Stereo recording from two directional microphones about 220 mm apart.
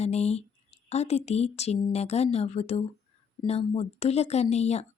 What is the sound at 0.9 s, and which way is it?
A woman's voice, 30° left (ahead or behind).